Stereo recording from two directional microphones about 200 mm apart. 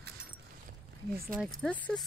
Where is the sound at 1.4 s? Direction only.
5° left (ahead or behind).